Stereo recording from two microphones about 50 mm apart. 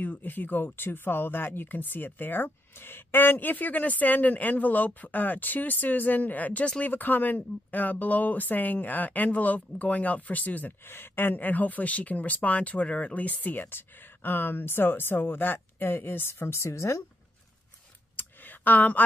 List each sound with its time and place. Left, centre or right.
0.0 s speech: left
10.9 s speech: left
18.1 s a sound: left